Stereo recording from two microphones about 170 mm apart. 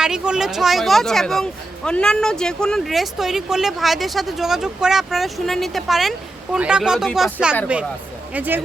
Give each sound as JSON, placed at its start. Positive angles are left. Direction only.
{"t": 0.0, "sound": "speech", "side_deg": -5}